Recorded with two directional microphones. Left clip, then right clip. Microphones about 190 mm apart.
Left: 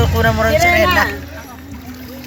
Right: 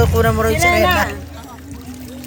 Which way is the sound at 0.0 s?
65° right (ahead or behind).